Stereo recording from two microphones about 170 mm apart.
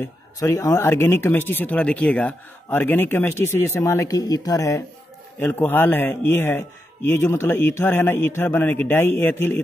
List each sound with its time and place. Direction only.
0.0 s speech: 20° left (ahead or behind)